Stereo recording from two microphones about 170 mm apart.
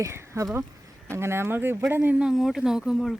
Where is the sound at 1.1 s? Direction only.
15° right (ahead or behind).